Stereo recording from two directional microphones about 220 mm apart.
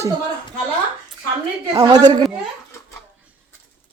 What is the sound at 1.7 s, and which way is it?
Speech, 20° right (ahead or behind).